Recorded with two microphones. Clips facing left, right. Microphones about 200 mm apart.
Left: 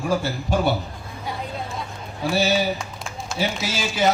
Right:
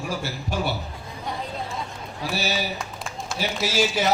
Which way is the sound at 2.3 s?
55° left (ahead or behind).